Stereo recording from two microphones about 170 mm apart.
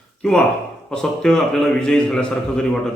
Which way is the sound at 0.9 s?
5° left (ahead or behind).